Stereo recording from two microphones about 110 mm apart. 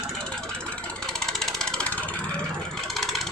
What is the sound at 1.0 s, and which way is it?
Vehicle, 5° left (ahead or behind).